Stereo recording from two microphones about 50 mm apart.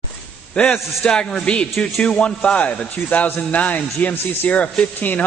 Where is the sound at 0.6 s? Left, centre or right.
Centre.